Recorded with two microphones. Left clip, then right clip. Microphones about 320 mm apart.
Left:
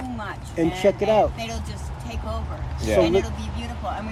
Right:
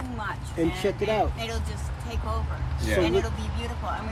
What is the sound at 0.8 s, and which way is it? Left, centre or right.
Speech, left.